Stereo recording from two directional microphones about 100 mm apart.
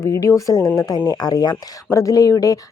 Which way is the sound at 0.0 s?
30° left (ahead or behind).